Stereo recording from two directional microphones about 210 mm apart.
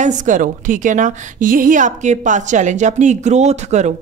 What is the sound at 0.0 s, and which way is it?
A woman's voice, 35° right (ahead or behind).